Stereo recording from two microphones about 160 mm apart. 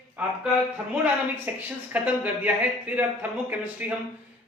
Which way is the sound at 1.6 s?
10° right (ahead or behind).